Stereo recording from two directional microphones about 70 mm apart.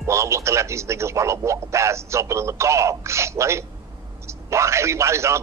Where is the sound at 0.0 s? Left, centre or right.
Right.